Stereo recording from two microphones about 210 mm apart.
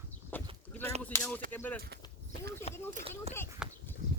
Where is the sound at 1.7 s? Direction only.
50° right (ahead or behind).